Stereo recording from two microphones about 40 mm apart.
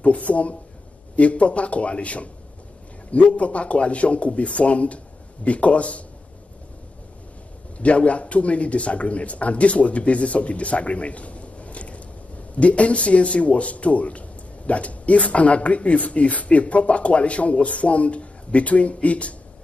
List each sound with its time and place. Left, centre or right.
0.0 s speech: left
7.8 s speech: left